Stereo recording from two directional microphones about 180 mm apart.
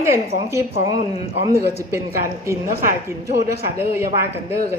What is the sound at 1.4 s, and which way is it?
Speech, 15° right (ahead or behind).